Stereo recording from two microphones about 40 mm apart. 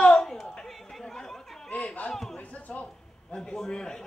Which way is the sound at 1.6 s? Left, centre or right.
Left.